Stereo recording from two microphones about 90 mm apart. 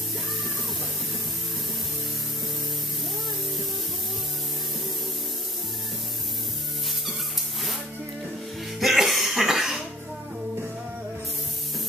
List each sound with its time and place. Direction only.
8.7 s cough: centre (ahead or behind)